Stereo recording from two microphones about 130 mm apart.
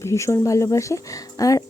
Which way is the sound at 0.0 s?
20° left (ahead or behind).